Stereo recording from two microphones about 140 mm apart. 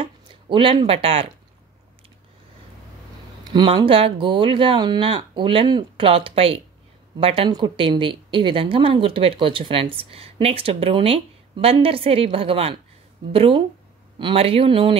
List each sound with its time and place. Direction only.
0.0 s speech: 35° right (ahead or behind)
3.5 s a woman's voice: 40° right (ahead or behind)